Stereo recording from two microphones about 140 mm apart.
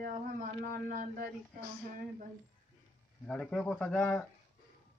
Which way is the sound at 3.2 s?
10° left (ahead or behind).